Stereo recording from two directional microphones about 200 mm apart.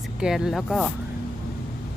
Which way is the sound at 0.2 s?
5° right (ahead or behind).